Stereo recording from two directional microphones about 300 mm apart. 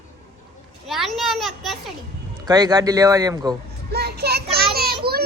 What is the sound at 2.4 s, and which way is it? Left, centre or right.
A man's voice, centre.